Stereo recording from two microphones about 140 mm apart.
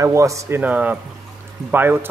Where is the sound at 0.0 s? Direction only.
20° right (ahead or behind).